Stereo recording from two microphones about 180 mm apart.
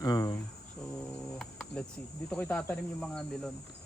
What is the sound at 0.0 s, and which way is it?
Cricket, 20° left (ahead or behind).